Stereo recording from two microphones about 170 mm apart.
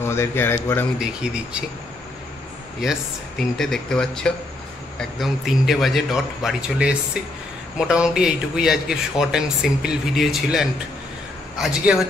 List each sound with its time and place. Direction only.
0.0 s speech: 15° left (ahead or behind)
0.9 s speech: 5° right (ahead or behind)
3.5 s speech: 5° left (ahead or behind)